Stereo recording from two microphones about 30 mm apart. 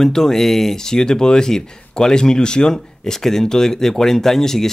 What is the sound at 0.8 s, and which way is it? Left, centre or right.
Speech, left.